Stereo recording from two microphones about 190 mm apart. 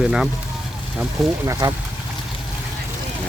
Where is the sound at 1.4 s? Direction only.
15° right (ahead or behind).